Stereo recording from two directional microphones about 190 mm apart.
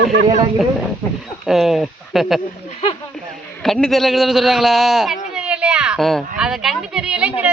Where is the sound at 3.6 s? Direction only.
5° left (ahead or behind).